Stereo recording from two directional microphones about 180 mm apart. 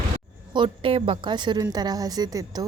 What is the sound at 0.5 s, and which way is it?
A woman's voice, 30° right (ahead or behind).